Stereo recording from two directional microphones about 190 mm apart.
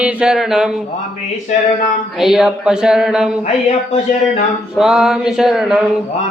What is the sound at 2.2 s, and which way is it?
Speech, centre (ahead or behind).